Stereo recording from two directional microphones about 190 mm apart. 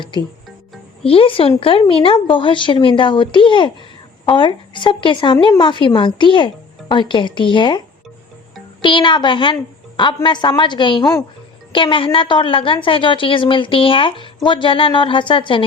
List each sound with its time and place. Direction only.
1.0 s speech: 30° left (ahead or behind)
8.8 s speech: 25° left (ahead or behind)